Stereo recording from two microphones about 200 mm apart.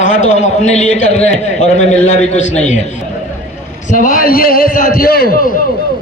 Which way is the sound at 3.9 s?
40° left (ahead or behind).